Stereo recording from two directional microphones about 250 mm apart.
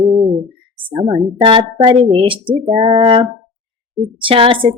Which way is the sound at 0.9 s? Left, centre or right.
Centre.